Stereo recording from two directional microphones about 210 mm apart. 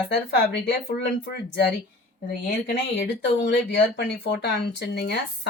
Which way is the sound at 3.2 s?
55° left (ahead or behind).